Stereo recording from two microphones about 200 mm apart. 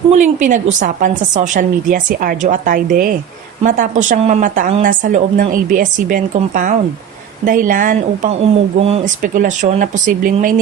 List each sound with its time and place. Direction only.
0.1 s a woman's voice: 40° right (ahead or behind)